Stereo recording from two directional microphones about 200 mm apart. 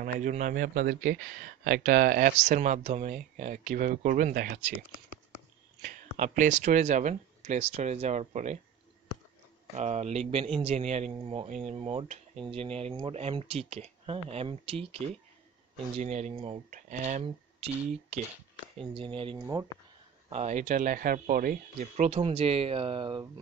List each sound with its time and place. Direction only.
0.0 s a man's voice: 40° right (ahead or behind)
5.8 s speech: 35° right (ahead or behind)
9.8 s speech: 35° right (ahead or behind)
16.7 s speech: 40° right (ahead or behind)
18.9 s speech: 25° right (ahead or behind)
20.2 s speech: 35° right (ahead or behind)